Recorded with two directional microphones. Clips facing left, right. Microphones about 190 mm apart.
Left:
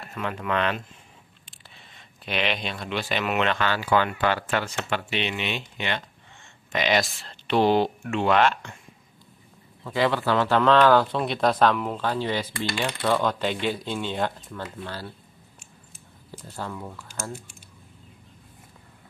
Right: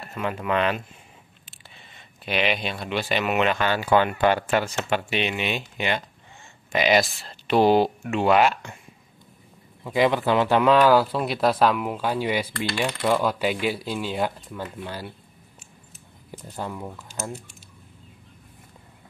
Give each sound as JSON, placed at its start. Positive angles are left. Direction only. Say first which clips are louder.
{"t": 0.1, "sound": "a man's voice", "louder": "right 2 dB", "side_deg": -5}
{"t": 9.8, "sound": "a man's voice", "louder": "right 3 dB", "side_deg": -15}
{"t": 16.3, "sound": "speech", "louder": "right 2 dB", "side_deg": -15}